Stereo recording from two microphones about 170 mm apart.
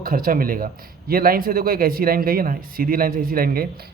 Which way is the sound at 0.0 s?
60° right (ahead or behind).